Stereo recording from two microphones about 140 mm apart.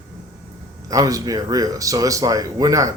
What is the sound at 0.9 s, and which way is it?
Speech, 25° right (ahead or behind).